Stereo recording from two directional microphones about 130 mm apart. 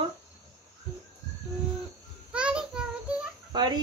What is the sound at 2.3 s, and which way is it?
Child singing, 5° right (ahead or behind).